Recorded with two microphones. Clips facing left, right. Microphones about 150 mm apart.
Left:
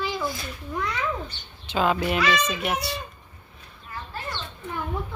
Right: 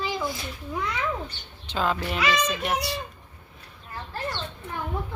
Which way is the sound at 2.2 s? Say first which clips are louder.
Left 2 dB; 15° right (ahead or behind).